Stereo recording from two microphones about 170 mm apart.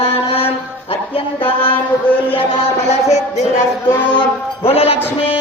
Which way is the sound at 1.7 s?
10° left (ahead or behind).